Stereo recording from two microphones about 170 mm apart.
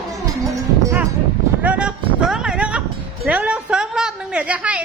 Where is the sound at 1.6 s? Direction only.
10° right (ahead or behind).